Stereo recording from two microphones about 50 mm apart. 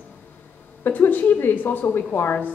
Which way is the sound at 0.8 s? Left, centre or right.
Left.